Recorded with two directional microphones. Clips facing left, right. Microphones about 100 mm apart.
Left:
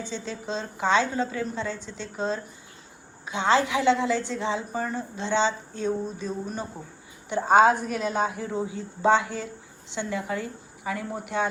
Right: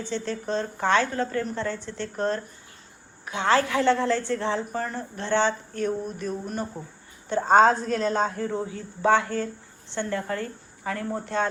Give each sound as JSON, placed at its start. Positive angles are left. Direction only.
{"t": 0.0, "sound": "a woman's voice", "side_deg": 15}